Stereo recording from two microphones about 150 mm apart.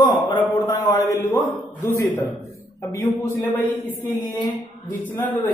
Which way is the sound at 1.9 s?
15° left (ahead or behind).